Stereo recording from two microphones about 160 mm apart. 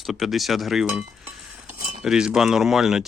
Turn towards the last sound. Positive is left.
turn(degrees=0)  # may be behind; listen again after turning